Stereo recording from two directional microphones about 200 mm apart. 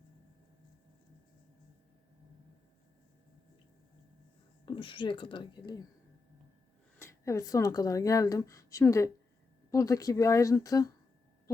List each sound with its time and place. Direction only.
4.6 s speech: 25° left (ahead or behind)
7.0 s speech: 15° left (ahead or behind)